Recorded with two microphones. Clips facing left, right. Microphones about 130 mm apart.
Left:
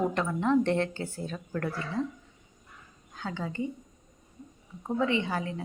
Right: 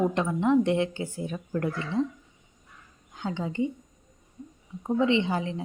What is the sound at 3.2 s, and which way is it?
Speech, 20° right (ahead or behind).